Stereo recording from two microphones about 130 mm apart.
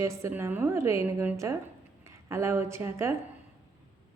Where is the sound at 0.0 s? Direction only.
20° right (ahead or behind).